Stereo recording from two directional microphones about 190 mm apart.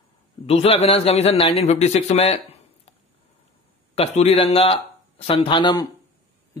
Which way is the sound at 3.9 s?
30° left (ahead or behind).